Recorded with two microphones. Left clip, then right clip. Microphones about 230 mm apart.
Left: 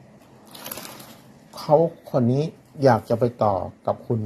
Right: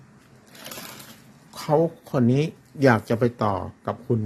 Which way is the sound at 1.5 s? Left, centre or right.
Centre.